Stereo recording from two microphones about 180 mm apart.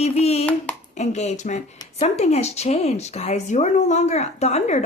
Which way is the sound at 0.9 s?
40° left (ahead or behind).